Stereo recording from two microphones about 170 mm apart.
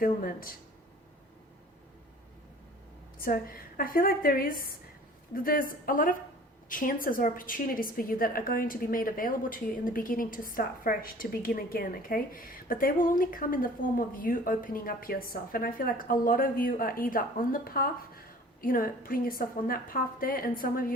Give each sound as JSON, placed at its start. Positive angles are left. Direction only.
{"t": 0.0, "sound": "a woman's voice", "side_deg": 60}
{"t": 3.2, "sound": "a woman's voice", "side_deg": 60}